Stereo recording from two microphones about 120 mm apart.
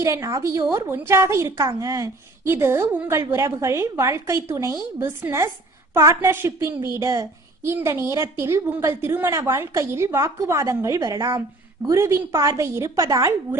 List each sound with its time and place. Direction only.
0.0 s a woman's voice: 25° right (ahead or behind)